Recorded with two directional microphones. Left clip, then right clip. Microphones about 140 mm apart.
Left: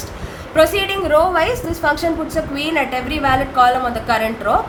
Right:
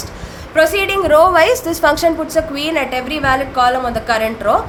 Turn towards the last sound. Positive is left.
turn(degrees=-25)  # may be behind; listen again after turning